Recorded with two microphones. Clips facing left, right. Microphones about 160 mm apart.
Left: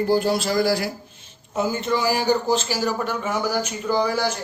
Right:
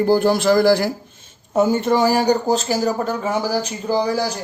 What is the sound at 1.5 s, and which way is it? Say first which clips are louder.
Speech: right 6 dB; 50° right (ahead or behind).